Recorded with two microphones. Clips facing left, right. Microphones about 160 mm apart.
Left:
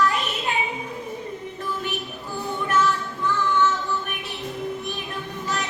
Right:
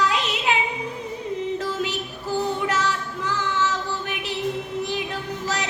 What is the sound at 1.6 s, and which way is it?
Music, 90° right.